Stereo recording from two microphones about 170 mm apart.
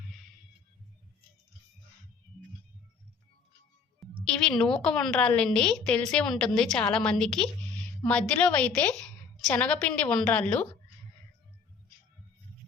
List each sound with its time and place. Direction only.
4.3 s a woman's voice: 5° left (ahead or behind)